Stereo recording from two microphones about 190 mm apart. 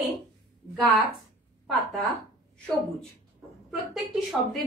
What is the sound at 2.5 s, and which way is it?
A woman's voice, 5° left (ahead or behind).